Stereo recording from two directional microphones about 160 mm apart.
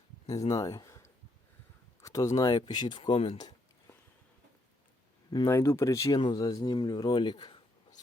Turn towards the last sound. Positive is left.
turn(degrees=25)  # may be behind; listen again after turning